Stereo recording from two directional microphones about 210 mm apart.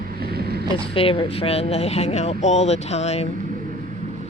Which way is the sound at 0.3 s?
50° right (ahead or behind).